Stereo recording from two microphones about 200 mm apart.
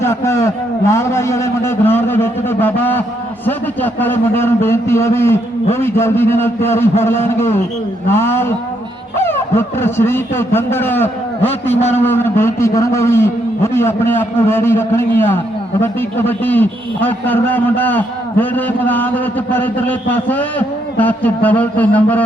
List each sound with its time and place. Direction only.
0.0 s a sound: 15° left (ahead or behind)
0.9 s a man's voice: 15° left (ahead or behind)
11.8 s a man's voice: 35° left (ahead or behind)
12.0 s a man's voice: 10° left (ahead or behind)